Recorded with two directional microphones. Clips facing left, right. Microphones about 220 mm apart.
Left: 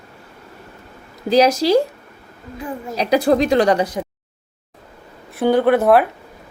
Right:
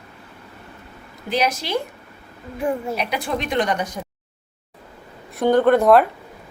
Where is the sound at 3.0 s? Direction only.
35° left (ahead or behind).